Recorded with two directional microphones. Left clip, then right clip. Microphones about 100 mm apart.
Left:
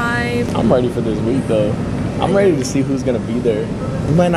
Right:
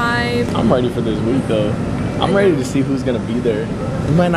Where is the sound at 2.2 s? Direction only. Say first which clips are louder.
Even; 5° right (ahead or behind).